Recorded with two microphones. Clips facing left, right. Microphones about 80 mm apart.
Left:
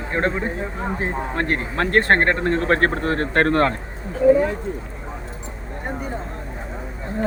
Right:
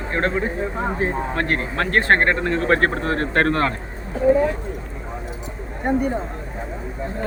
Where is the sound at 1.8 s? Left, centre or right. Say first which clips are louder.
Left 1 dB; left.